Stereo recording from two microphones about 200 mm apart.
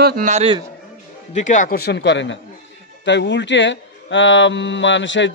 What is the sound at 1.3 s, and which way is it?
A man's voice, 40° left (ahead or behind).